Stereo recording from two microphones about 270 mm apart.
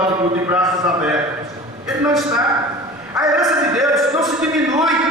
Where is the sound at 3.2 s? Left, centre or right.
Centre.